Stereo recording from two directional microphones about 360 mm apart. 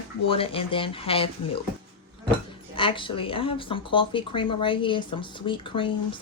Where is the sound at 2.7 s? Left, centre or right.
Centre.